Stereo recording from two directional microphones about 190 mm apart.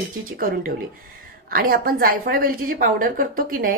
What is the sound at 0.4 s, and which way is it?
A woman's voice, 50° right (ahead or behind).